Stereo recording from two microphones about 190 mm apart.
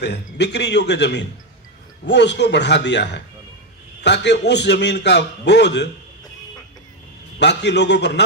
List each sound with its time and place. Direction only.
0.0 s a man's voice: 60° left (ahead or behind)
7.3 s a man's voice: 65° left (ahead or behind)